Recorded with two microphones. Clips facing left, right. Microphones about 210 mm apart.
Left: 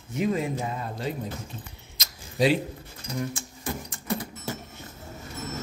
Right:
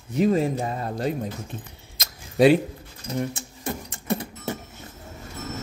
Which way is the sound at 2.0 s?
55° right (ahead or behind).